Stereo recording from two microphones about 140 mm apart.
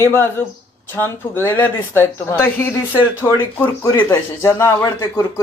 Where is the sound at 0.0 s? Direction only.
15° left (ahead or behind).